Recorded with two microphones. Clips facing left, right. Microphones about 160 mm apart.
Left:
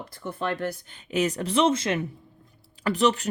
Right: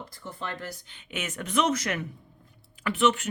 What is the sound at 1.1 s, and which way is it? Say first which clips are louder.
Speech: left 8 dB; 35° left (ahead or behind).